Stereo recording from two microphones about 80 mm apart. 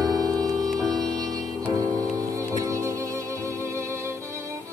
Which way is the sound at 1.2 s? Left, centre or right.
Right.